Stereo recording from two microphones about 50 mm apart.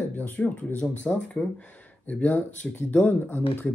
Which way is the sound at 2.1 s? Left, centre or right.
Left.